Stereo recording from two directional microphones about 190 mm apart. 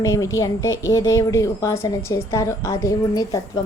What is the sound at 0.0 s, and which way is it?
A woman's voice, 15° left (ahead or behind).